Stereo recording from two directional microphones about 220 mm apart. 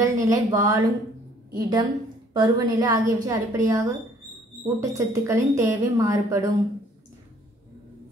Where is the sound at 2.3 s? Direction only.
20° right (ahead or behind).